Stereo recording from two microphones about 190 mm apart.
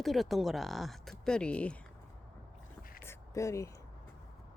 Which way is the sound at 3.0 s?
15° left (ahead or behind).